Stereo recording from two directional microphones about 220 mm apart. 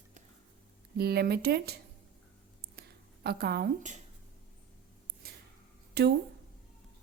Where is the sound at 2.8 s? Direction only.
45° right (ahead or behind).